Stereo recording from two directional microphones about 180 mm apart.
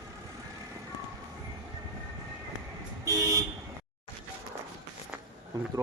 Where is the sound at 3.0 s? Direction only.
15° right (ahead or behind).